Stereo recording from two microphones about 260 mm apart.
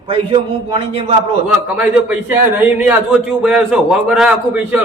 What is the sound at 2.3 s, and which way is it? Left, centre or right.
A man's voice, centre.